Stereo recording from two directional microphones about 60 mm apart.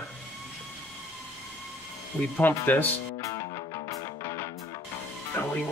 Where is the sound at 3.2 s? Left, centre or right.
Left.